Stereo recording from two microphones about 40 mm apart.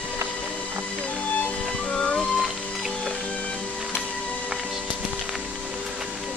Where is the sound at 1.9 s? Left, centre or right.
Left.